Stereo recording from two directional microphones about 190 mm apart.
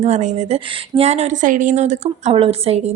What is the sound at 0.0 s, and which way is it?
A woman's voice, 35° right (ahead or behind).